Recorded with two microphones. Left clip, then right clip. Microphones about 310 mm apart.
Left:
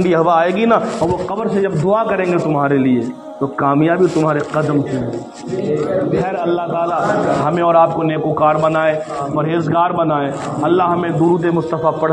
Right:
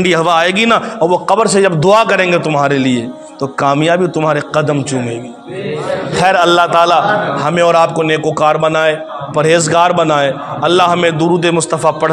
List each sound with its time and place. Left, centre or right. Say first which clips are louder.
0.1 s a man's voice: right 1 dB; right
6.2 s a man's voice: right 9 dB; right